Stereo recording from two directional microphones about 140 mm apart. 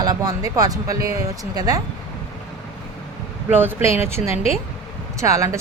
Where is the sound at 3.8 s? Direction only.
45° left (ahead or behind).